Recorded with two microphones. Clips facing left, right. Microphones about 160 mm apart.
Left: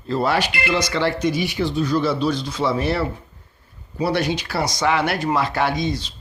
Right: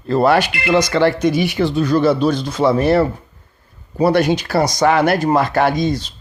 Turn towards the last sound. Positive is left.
turn(degrees=-45)  # may be behind; listen again after turning